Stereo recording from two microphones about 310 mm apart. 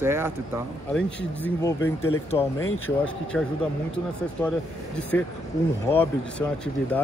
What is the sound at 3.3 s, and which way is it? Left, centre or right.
Speech, centre.